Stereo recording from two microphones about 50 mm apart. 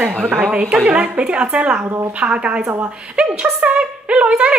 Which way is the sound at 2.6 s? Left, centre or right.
Right.